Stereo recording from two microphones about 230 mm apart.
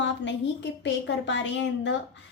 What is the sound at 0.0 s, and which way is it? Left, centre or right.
A woman's voice, left.